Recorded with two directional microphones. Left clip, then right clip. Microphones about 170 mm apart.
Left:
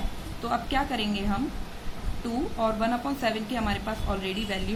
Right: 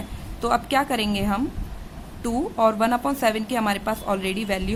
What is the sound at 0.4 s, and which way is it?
Speech, 45° right (ahead or behind).